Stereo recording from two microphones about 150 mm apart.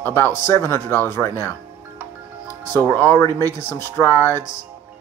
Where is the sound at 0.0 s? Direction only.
15° left (ahead or behind).